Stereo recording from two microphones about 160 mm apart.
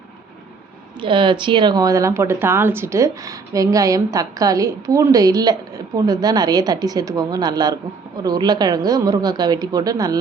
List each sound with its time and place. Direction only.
0.9 s speech: 30° right (ahead or behind)